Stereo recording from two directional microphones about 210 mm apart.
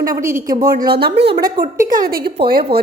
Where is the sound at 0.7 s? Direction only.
45° right (ahead or behind).